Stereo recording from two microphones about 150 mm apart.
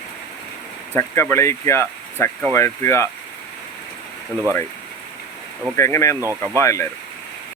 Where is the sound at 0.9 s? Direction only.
15° left (ahead or behind).